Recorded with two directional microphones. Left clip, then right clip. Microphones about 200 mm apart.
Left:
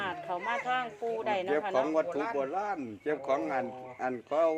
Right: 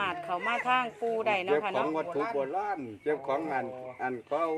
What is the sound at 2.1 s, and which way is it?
Speech, 10° right (ahead or behind).